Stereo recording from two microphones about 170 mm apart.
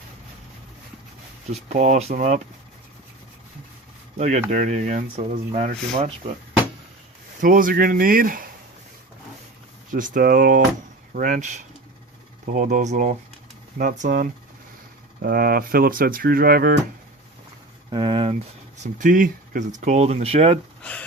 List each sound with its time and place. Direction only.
1.7 s speech: 45° right (ahead or behind)
4.2 s speech: 40° right (ahead or behind)
7.4 s speech: 55° right (ahead or behind)
9.9 s speech: 55° right (ahead or behind)
17.9 s speech: 30° right (ahead or behind)
18.8 s speech: 50° right (ahead or behind)
20.8 s a sound: 10° left (ahead or behind)